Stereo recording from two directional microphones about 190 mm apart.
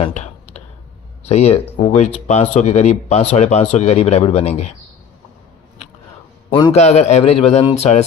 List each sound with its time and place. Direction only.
0.0 s clicking: 35° left (ahead or behind)
1.2 s speech: 35° left (ahead or behind)
6.5 s a man's voice: 25° left (ahead or behind)
6.7 s speech: 35° left (ahead or behind)